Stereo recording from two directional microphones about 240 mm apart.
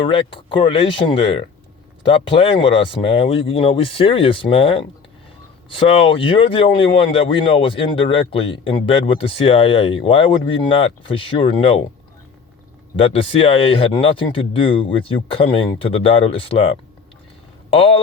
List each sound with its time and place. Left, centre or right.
0.0 s speech: left
13.0 s speech: left